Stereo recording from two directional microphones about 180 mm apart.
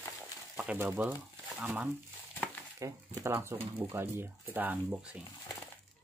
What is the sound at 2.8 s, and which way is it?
Speech, 20° right (ahead or behind).